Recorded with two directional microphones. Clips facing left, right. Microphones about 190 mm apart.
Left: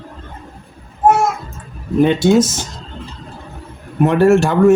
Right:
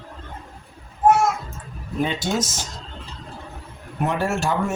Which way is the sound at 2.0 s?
60° left (ahead or behind).